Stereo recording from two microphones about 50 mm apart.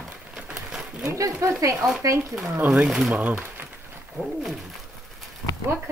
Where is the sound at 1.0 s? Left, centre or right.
Right.